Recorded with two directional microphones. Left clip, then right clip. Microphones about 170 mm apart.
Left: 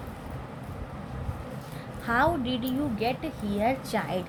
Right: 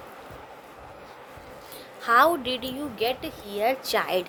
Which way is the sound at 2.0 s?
30° right (ahead or behind).